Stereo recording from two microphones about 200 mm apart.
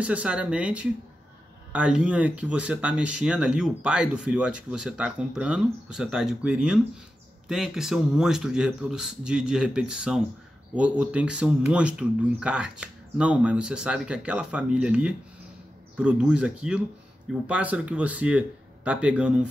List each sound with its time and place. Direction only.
0.0 s speech: 5° right (ahead or behind)